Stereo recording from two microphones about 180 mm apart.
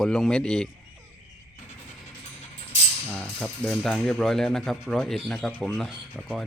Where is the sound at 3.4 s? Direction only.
5° left (ahead or behind).